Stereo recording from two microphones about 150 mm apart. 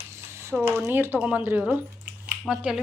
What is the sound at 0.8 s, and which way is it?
Speech, 15° right (ahead or behind).